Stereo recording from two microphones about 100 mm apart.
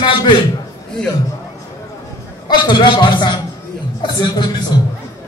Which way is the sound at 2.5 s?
50° left (ahead or behind).